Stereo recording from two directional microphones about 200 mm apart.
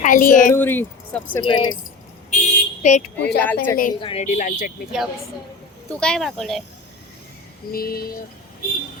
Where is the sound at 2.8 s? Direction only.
35° left (ahead or behind).